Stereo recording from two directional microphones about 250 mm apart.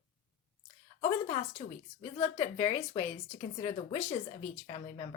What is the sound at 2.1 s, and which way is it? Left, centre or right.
A woman's voice, left.